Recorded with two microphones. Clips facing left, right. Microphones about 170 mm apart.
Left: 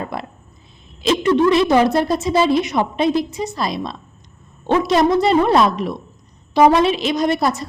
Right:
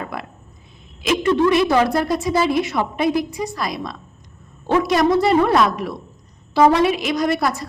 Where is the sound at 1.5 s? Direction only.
20° left (ahead or behind).